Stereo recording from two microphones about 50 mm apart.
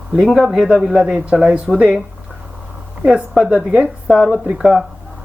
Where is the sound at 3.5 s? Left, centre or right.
Right.